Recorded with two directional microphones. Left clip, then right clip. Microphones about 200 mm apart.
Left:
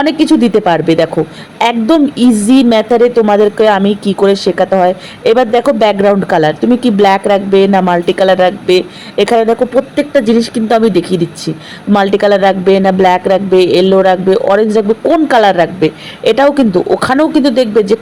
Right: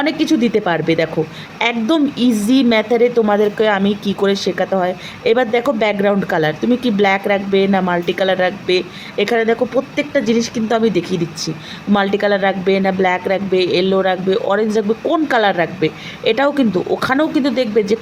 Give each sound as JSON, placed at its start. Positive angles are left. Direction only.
{"t": 0.0, "sound": "speech", "side_deg": 25}